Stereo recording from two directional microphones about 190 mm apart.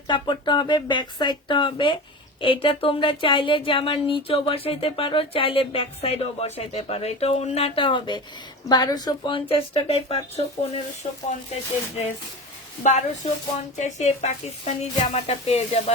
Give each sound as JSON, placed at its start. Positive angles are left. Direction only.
{"t": 0.1, "sound": "speech", "side_deg": 25}
{"t": 12.8, "sound": "a woman's voice", "side_deg": 40}